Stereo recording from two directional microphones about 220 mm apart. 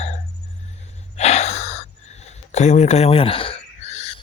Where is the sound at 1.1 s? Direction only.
30° left (ahead or behind).